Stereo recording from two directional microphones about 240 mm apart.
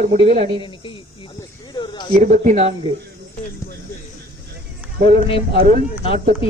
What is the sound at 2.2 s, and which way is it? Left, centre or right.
Speech, right.